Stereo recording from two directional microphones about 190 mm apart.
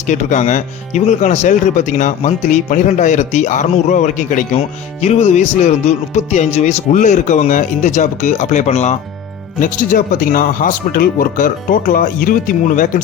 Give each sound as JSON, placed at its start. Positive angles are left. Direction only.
{"t": 0.1, "sound": "speech", "side_deg": 40}